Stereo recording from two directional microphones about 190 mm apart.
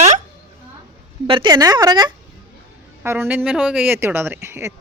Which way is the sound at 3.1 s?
10° right (ahead or behind).